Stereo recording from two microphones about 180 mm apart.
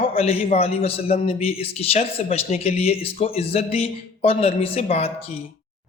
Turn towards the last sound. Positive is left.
turn(degrees=35)  # may be behind; listen again after turning